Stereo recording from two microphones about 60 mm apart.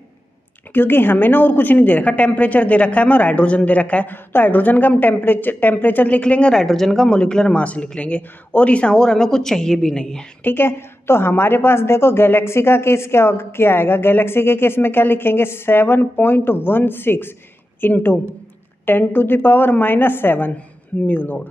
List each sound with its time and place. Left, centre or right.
0.7 s a woman's voice: left
6.2 s a man's voice: centre
10.4 s a woman's voice: left